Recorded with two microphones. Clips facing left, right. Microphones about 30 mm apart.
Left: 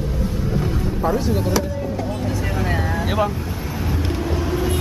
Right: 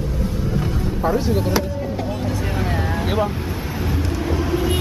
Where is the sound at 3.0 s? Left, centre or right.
Centre.